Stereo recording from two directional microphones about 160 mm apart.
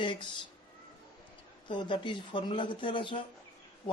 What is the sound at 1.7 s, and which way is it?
Speech, 30° left (ahead or behind).